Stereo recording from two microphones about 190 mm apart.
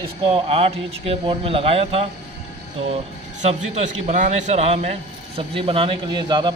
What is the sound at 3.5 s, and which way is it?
A man's voice, 35° right (ahead or behind).